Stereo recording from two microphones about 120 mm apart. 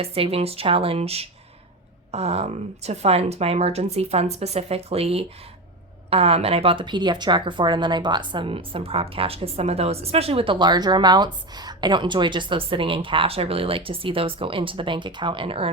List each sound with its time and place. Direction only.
0.0 s a woman's voice: 55° right (ahead or behind)